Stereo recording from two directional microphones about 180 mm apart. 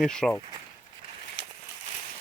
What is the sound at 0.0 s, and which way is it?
Speech, 5° left (ahead or behind).